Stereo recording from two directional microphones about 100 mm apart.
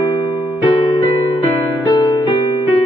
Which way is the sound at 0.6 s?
60° left (ahead or behind).